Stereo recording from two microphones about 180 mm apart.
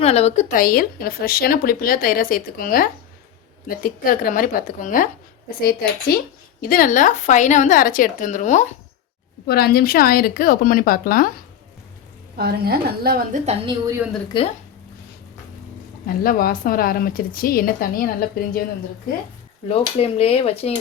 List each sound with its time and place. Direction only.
0.0 s a woman's voice: 35° left (ahead or behind)
6.6 s a woman's voice: 50° left (ahead or behind)
9.5 s a woman's voice: 60° left (ahead or behind)
12.4 s a woman's voice: 60° right (ahead or behind)
13.4 s a woman's voice: 35° right (ahead or behind)
14.3 s speech: 25° left (ahead or behind)
16.0 s a woman's voice: 55° left (ahead or behind)
19.6 s speech: 35° left (ahead or behind)